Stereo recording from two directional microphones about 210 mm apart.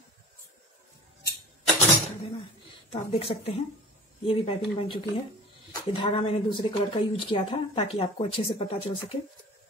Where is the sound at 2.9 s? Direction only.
30° left (ahead or behind).